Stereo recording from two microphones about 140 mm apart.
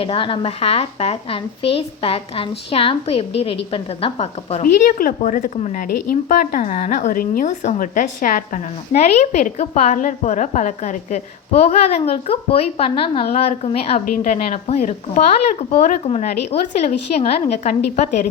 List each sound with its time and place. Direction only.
0.0 s a woman's voice: 40° left (ahead or behind)
4.6 s a woman's voice: 85° left; by 18.3 s 55° left (ahead or behind)